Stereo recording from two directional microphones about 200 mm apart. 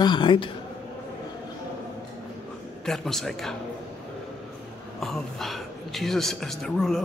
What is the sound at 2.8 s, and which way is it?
Speech, centre (ahead or behind).